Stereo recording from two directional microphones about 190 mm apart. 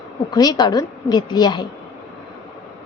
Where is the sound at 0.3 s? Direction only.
20° left (ahead or behind).